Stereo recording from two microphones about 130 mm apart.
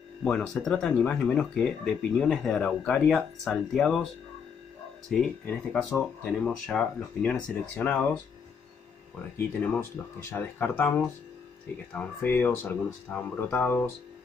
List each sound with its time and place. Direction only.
0.2 s speech: 10° left (ahead or behind)
5.1 s speech: 5° left (ahead or behind)
9.6 s speech: 15° left (ahead or behind)